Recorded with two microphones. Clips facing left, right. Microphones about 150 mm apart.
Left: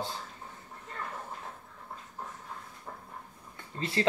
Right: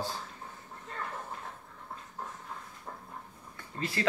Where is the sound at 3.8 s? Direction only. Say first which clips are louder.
Left 3 dB; 25° left (ahead or behind).